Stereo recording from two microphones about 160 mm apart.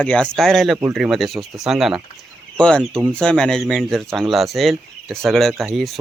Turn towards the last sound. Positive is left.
turn(degrees=0)  # may be behind; listen again after turning